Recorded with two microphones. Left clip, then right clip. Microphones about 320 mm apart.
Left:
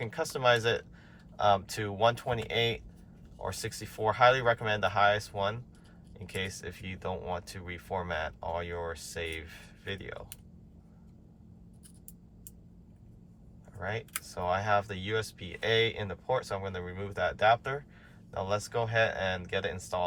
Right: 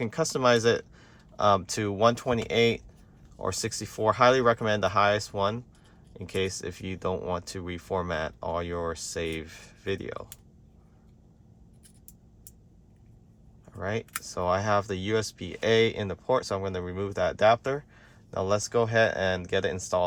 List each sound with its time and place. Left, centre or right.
0.1 s speech: right
14.1 s speech: centre